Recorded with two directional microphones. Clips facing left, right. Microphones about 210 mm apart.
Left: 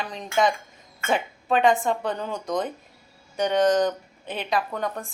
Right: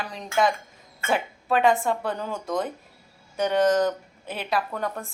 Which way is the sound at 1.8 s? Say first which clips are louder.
Left 1 dB; 5° right (ahead or behind).